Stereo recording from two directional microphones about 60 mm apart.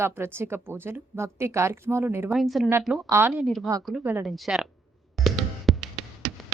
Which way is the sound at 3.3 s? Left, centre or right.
Centre.